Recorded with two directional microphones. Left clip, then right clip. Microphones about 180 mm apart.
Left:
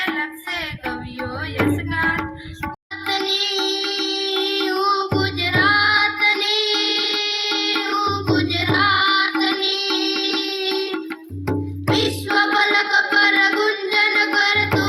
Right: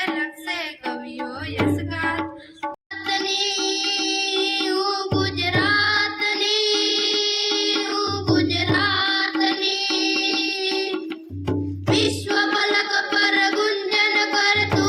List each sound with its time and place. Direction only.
3.1 s music: 45° right (ahead or behind)
11.9 s music: 45° right (ahead or behind)